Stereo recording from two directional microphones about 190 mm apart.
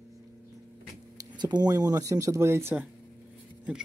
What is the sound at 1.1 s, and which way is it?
Speech, 20° right (ahead or behind).